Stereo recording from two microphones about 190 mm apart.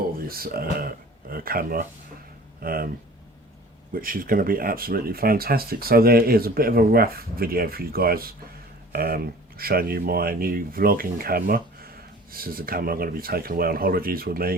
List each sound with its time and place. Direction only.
0.3 s speech: 50° right (ahead or behind)
3.9 s speech: 50° right (ahead or behind)